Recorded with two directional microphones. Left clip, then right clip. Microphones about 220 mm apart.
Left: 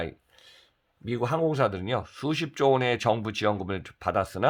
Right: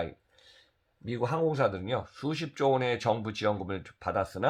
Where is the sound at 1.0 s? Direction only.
40° left (ahead or behind).